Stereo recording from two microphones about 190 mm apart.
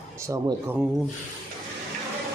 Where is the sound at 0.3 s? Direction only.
20° right (ahead or behind).